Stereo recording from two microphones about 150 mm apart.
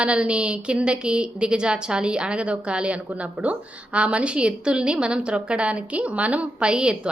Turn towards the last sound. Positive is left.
turn(degrees=-5)  # may be behind; listen again after turning